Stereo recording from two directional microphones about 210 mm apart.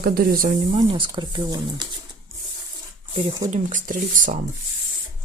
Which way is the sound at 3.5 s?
35° right (ahead or behind).